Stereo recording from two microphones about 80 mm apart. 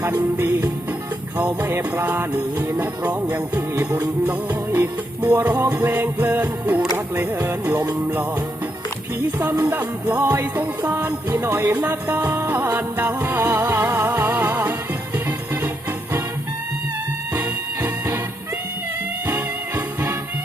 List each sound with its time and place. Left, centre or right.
0.0 s music: right
9.4 s music: right
17.3 s music: right
19.3 s music: right